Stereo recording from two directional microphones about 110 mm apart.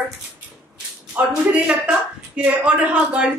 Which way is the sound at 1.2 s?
15° right (ahead or behind).